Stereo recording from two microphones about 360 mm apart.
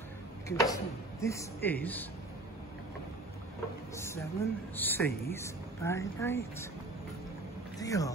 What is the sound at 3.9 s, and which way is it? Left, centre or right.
Speech, centre.